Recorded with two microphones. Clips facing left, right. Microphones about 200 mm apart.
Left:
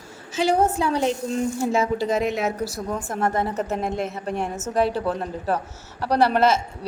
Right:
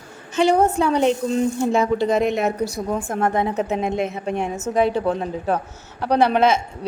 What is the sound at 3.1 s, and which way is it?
Speech, 55° right (ahead or behind).